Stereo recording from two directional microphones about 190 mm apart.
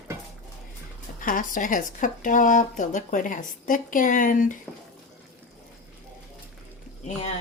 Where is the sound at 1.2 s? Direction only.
45° left (ahead or behind).